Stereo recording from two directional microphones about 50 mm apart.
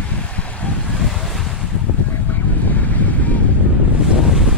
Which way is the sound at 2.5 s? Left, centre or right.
Left.